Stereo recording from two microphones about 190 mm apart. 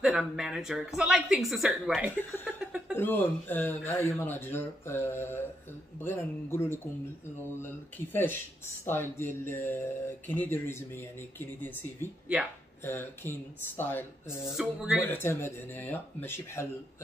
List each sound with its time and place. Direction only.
0.0 s a woman's voice: centre (ahead or behind)
2.6 s a sound: centre (ahead or behind)
3.0 s speech: 10° left (ahead or behind)
14.2 s a woman's voice: 5° right (ahead or behind)
15.0 s speech: 10° left (ahead or behind)